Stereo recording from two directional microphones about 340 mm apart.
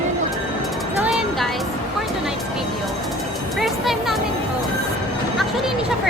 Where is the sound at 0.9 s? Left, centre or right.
Centre.